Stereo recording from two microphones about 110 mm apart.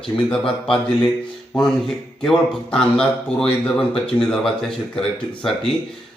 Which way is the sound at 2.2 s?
5° left (ahead or behind).